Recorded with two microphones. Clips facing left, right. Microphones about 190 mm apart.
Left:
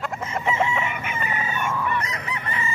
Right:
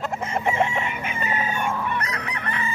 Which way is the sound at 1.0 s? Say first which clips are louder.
Right 1 dB; 60° left (ahead or behind).